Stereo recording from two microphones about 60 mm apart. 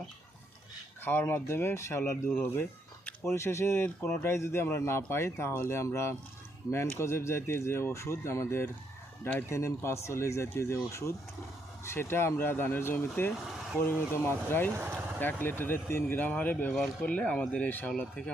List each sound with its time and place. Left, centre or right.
1.0 s speech: left
3.2 s speech: left
11.9 s speech: left
17.9 s speech: centre